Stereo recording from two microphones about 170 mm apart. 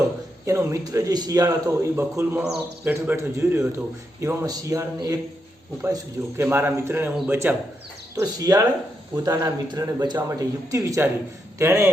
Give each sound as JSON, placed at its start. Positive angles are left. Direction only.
{"t": 0.4, "sound": "a man's voice", "side_deg": -20}